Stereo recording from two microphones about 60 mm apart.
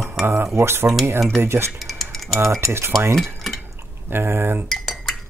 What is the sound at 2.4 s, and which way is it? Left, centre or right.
Speech, right.